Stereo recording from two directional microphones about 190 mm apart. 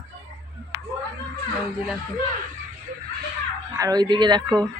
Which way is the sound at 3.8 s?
20° right (ahead or behind).